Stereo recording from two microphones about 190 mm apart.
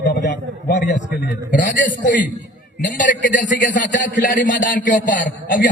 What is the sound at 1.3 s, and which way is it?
A man's voice, 45° left (ahead or behind).